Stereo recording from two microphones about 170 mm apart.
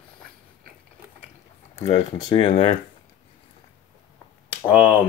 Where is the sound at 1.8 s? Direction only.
30° left (ahead or behind).